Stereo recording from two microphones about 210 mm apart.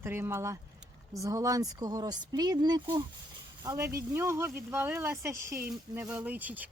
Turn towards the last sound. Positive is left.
turn(degrees=-5)  # may be behind; listen again after turning